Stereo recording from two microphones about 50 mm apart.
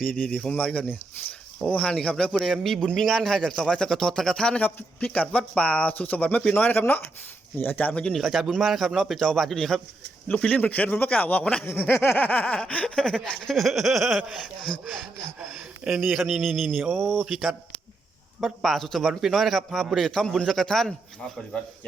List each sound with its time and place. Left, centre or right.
0.0 s speech: centre
2.3 s a man's voice: centre
4.6 s speech: left
5.9 s speech: left
6.4 s speech: centre
6.7 s speech: left
8.1 s a man's voice: centre
10.2 s speech: left
11.8 s speech: left
13.0 s a man's voice: centre
14.7 s speech: centre
15.4 s speech: centre
16.3 s a man's voice: centre
17.2 s a man's voice: centre